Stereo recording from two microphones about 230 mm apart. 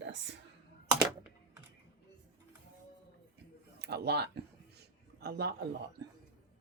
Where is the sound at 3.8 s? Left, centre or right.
Right.